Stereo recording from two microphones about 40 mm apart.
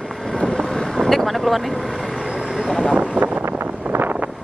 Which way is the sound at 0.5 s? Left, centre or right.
Centre.